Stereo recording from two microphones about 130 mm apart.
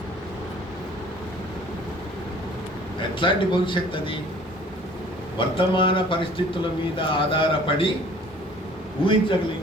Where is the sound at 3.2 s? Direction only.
40° left (ahead or behind).